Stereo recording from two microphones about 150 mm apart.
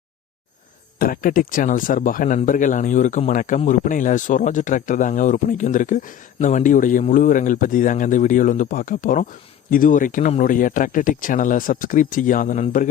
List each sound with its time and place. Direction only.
0.9 s speech: 70° left (ahead or behind)